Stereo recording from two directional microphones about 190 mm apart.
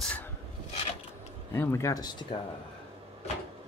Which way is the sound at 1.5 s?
15° left (ahead or behind).